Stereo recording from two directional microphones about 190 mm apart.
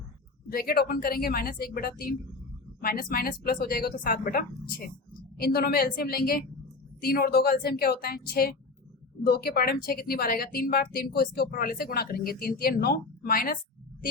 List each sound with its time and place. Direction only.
0.5 s speech: 55° left (ahead or behind)